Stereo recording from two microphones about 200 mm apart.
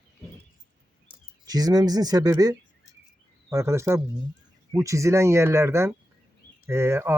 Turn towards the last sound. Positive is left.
turn(degrees=-10)  # may be behind; listen again after turning